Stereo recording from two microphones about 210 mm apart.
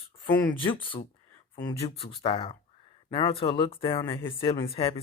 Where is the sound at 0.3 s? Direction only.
25° left (ahead or behind).